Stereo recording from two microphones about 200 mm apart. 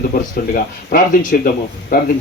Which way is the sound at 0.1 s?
45° left (ahead or behind).